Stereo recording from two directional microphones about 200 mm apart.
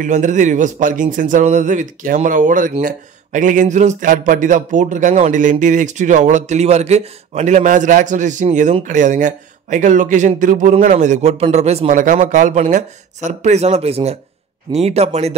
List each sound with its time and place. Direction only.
0.0 s speech: 40° right (ahead or behind)